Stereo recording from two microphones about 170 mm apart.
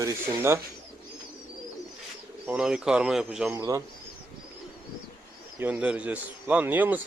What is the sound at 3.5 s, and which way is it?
Speech, 20° right (ahead or behind).